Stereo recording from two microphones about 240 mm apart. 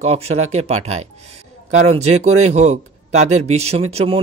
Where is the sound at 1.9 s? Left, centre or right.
Right.